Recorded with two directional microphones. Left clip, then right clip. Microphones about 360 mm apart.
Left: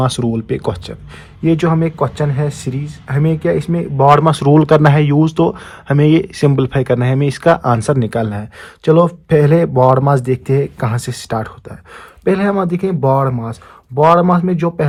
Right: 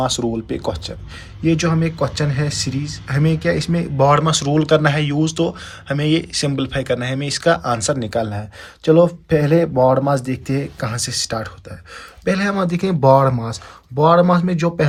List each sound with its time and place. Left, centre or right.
0.0 s speech: centre